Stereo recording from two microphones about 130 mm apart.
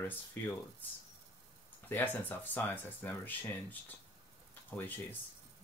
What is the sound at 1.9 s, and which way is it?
Speech, 15° left (ahead or behind).